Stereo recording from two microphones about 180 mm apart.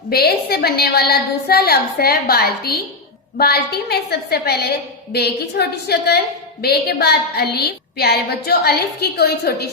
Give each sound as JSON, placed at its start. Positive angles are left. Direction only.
{"t": 0.1, "sound": "a woman's voice", "side_deg": 60}